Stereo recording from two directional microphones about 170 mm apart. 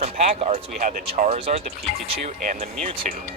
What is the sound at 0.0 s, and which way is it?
Speech, 40° right (ahead or behind).